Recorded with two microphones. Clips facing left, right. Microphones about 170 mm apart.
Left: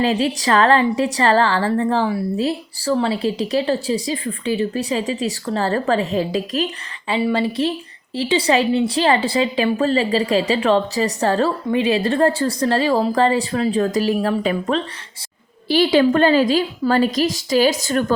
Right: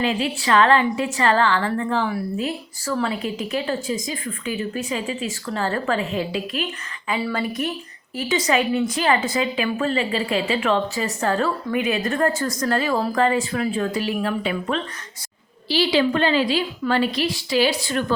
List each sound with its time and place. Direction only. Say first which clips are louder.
0.0 s a woman's voice: left 4 dB; 35° left (ahead or behind)
7.1 s a woman's voice: left 5 dB; 25° left (ahead or behind)
15.7 s a woman's voice: left 5 dB; 50° left (ahead or behind)